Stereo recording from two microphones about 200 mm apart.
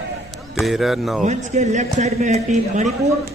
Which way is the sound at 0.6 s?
Centre (ahead or behind).